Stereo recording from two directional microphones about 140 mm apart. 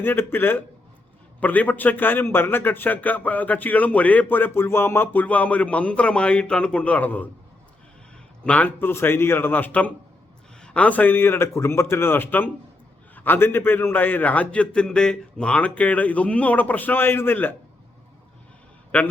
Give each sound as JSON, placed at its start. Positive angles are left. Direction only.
{"t": 0.0, "sound": "a man's voice", "side_deg": 15}
{"t": 8.4, "sound": "a man's voice", "side_deg": 10}
{"t": 18.9, "sound": "a man's voice", "side_deg": 10}